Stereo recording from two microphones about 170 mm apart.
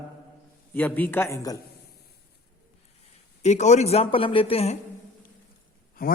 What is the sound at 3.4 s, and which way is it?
Speech, 40° left (ahead or behind).